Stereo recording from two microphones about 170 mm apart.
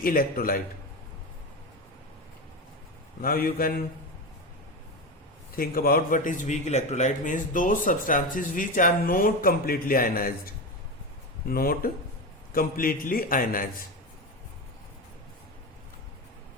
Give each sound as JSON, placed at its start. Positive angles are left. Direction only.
{"t": 0.0, "sound": "a man's voice", "side_deg": 60}
{"t": 3.2, "sound": "a man's voice", "side_deg": 60}
{"t": 5.5, "sound": "a man's voice", "side_deg": 60}